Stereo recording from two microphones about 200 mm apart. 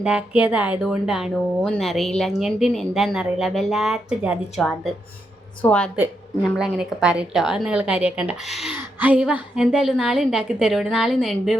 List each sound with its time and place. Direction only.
0.0 s a woman's voice: 5° right (ahead or behind)